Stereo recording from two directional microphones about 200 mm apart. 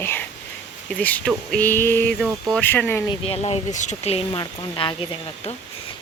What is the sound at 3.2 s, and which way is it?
Speech, 30° left (ahead or behind).